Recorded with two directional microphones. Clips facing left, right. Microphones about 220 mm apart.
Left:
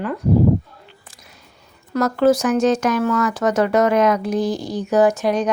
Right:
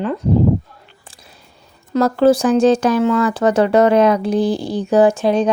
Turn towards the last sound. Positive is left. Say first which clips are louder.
# right 3 dB
turn(degrees=-30)  # may be behind; listen again after turning